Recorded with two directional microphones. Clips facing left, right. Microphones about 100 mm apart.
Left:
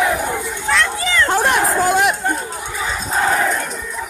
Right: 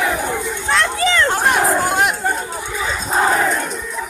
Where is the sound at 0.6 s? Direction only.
15° right (ahead or behind).